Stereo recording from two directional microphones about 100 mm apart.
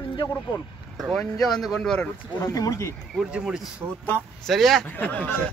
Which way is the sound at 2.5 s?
35° left (ahead or behind).